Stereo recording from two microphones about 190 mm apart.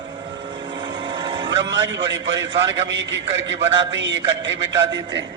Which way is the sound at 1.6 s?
70° right (ahead or behind).